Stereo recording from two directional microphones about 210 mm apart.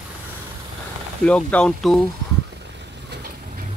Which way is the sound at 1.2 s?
5° left (ahead or behind).